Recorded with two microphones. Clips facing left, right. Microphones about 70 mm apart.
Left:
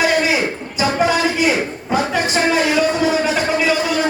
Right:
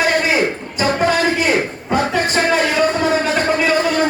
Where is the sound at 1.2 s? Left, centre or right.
Right.